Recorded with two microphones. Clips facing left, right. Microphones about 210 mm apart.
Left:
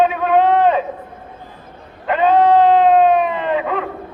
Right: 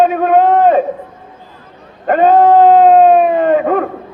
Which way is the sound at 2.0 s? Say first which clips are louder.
Right 5 dB; 45° right (ahead or behind).